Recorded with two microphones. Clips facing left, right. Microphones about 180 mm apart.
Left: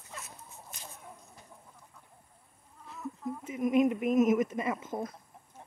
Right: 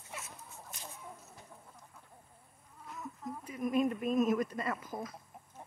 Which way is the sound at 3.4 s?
20° left (ahead or behind).